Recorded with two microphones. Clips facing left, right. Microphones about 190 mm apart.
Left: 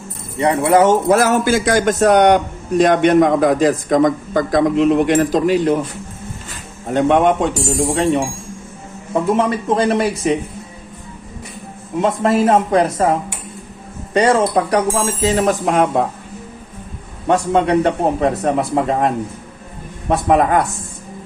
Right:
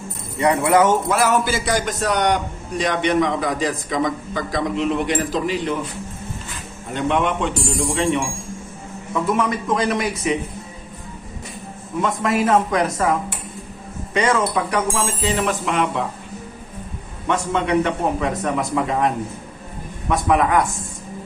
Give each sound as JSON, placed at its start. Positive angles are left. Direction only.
{"t": 0.3, "sound": "speech", "side_deg": 25}
{"t": 1.1, "sound": "a man's voice", "side_deg": 45}
{"t": 6.8, "sound": "a man's voice", "side_deg": 45}
{"t": 12.0, "sound": "speech", "side_deg": 30}
{"t": 17.2, "sound": "speech", "side_deg": 40}